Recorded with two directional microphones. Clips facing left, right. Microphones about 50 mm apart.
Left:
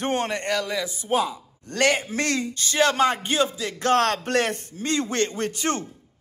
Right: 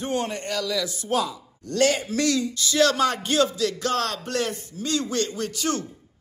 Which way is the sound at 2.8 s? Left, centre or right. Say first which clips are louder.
Left 1 dB; left.